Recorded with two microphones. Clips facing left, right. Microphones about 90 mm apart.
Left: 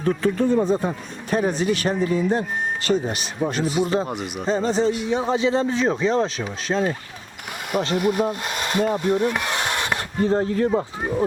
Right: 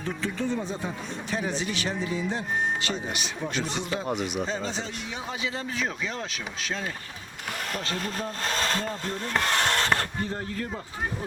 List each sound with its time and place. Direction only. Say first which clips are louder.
0.0 s speech: left 10 dB; 50° left (ahead or behind)
3.6 s speech: left 10 dB; 5° left (ahead or behind)
4.4 s speech: left 11 dB; 40° left (ahead or behind)
7.9 s speech: left 11 dB; 15° left (ahead or behind)
9.0 s a sound: left 7 dB; 15° left (ahead or behind)
10.2 s speech: left 13 dB; 35° left (ahead or behind)